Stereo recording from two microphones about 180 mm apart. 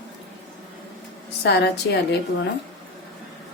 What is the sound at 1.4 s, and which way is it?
Speech, 70° left (ahead or behind).